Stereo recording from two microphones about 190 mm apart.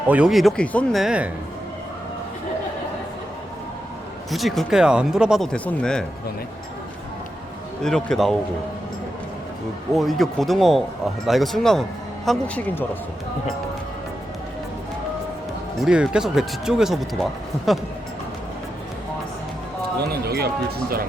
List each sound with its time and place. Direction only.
0.1 s speech: 5° right (ahead or behind)
4.3 s speech: centre (ahead or behind)
7.8 s speech: 5° left (ahead or behind)
9.9 s speech: centre (ahead or behind)
15.8 s speech: 5° right (ahead or behind)
20.2 s speech: 55° right (ahead or behind)